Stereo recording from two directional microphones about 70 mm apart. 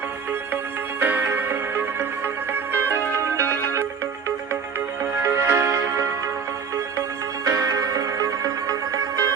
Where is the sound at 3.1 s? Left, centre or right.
Right.